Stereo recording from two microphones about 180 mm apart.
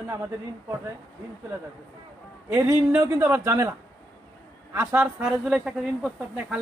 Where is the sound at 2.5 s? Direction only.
15° right (ahead or behind).